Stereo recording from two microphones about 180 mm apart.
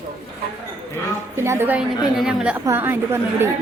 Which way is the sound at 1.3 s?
15° right (ahead or behind).